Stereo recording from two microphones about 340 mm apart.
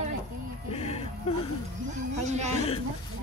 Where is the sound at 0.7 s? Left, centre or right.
Centre.